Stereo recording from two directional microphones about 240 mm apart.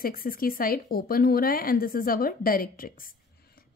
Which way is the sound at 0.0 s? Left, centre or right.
Left.